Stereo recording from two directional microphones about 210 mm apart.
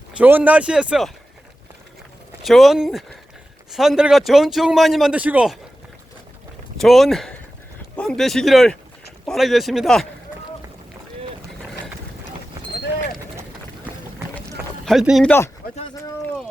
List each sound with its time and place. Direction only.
0.2 s speech: 10° right (ahead or behind)
2.4 s speech: centre (ahead or behind)
6.7 s a man's voice: centre (ahead or behind)
14.8 s speech: centre (ahead or behind)